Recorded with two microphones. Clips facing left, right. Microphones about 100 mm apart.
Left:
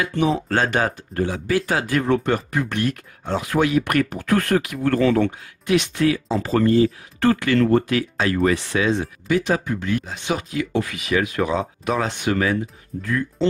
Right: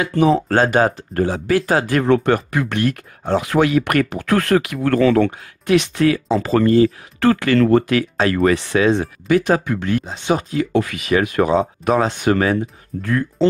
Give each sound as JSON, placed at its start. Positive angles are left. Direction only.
{"t": 0.0, "sound": "speech", "side_deg": -40}
{"t": 2.0, "sound": "speech", "side_deg": -70}
{"t": 7.3, "sound": "speech", "side_deg": -65}
{"t": 8.3, "sound": "speech", "side_deg": -90}
{"t": 9.0, "sound": "speech", "side_deg": -45}
{"t": 9.7, "sound": "speech", "side_deg": -65}
{"t": 10.0, "sound": "speech", "side_deg": -30}
{"t": 10.7, "sound": "speech", "side_deg": -60}